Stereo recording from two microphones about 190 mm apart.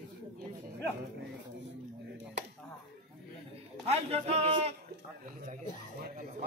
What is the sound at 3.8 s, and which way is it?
Speech, 35° right (ahead or behind).